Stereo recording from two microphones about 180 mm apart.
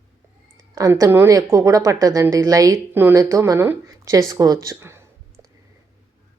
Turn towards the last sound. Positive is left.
turn(degrees=-15)  # may be behind; listen again after turning